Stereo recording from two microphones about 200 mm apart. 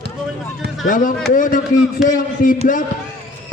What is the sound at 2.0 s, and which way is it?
Speech, centre (ahead or behind).